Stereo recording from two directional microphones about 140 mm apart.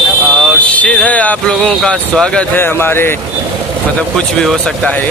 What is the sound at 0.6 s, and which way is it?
Speech, 10° left (ahead or behind).